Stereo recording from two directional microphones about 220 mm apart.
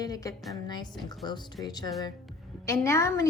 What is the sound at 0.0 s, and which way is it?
A woman's voice, 15° left (ahead or behind).